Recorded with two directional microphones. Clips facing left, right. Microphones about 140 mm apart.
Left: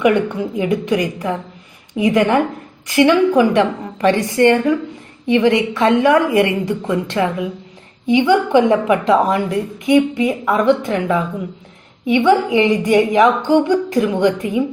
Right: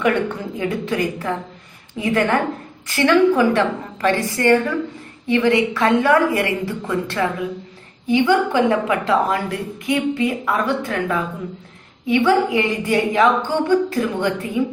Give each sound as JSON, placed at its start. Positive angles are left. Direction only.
{"t": 0.0, "sound": "a woman's voice", "side_deg": 15}